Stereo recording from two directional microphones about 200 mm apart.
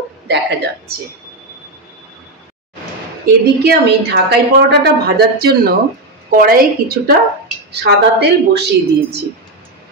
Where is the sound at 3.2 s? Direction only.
50° right (ahead or behind).